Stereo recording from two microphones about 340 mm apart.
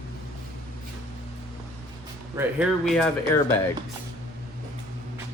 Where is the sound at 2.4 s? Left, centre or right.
Centre.